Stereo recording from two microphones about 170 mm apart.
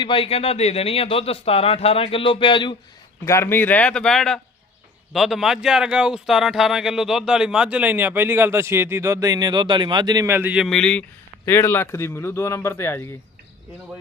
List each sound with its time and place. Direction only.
0.0 s speech: 30° left (ahead or behind)
3.2 s speech: 15° left (ahead or behind)